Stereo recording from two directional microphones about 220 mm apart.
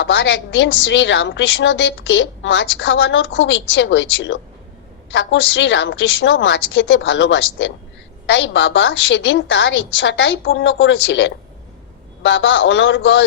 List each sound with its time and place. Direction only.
0.0 s a woman's voice: 55° left (ahead or behind)